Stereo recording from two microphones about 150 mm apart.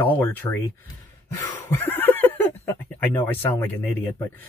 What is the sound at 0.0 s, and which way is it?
Speech, 10° left (ahead or behind).